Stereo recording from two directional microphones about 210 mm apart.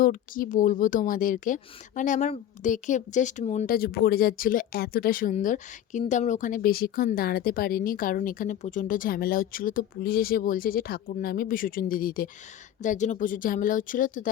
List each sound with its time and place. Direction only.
0.0 s speech: 40° left (ahead or behind)